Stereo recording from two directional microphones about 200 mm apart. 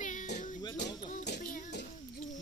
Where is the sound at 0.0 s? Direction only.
40° left (ahead or behind).